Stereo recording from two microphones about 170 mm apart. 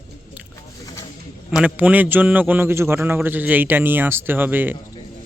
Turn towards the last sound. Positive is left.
turn(degrees=-10)  # may be behind; listen again after turning